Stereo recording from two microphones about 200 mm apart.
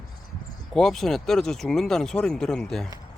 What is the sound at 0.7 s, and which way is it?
Speech, centre (ahead or behind).